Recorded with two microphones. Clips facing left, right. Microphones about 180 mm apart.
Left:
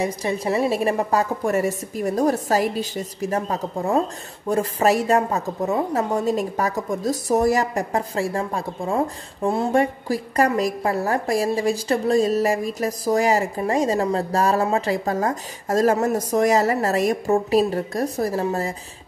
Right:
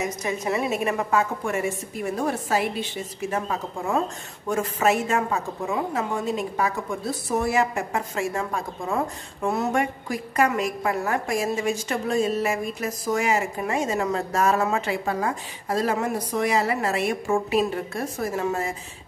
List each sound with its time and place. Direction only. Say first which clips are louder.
0.0 s a woman's voice: left 4 dB; 30° left (ahead or behind)